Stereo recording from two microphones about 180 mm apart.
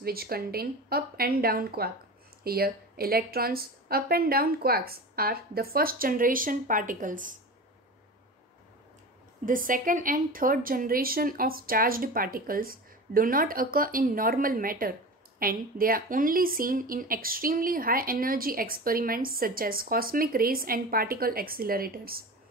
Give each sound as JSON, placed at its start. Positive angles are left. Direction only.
{"t": 0.0, "sound": "a woman's voice", "side_deg": -55}
{"t": 9.5, "sound": "speech", "side_deg": -50}